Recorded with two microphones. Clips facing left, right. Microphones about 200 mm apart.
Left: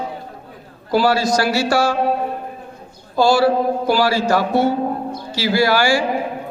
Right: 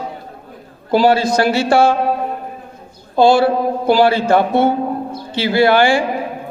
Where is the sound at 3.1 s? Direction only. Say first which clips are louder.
Right 3 dB; 55° right (ahead or behind).